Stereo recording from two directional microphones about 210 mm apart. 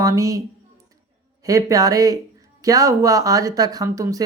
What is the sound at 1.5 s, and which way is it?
Speech, 15° right (ahead or behind).